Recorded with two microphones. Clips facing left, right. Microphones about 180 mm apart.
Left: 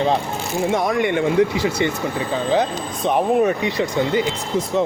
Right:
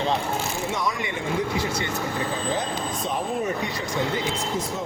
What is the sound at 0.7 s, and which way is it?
Speech, 55° left (ahead or behind).